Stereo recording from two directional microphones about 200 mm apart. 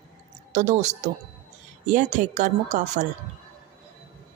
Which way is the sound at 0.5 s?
35° right (ahead or behind).